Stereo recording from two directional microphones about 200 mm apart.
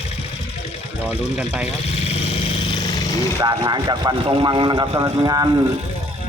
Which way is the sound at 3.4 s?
20° right (ahead or behind).